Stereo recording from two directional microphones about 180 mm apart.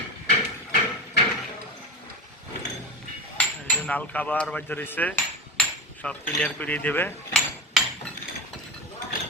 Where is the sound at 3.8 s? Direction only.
10° left (ahead or behind).